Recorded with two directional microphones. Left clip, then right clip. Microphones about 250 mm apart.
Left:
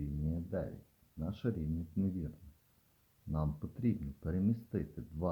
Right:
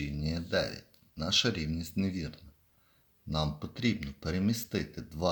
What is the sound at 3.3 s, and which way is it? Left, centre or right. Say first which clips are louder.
Speech: right 7 dB; centre.